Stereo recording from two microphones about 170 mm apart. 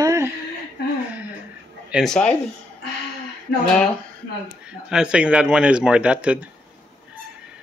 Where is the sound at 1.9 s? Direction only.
5° left (ahead or behind).